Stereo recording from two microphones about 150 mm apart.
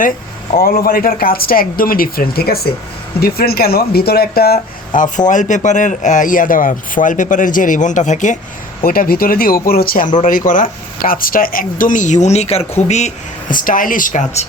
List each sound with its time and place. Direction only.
0.6 s speech: 75° left (ahead or behind)
4.9 s speech: 60° left (ahead or behind)
8.8 s speech: 80° left
10.2 s speech: 60° left (ahead or behind)